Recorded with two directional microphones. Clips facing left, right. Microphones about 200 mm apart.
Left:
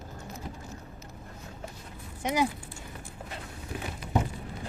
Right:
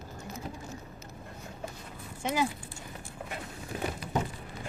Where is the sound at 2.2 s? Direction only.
15° left (ahead or behind).